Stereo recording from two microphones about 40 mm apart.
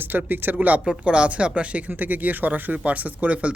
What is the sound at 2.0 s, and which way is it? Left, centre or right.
Speech, right.